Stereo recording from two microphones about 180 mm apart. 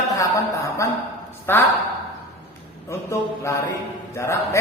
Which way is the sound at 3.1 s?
15° left (ahead or behind).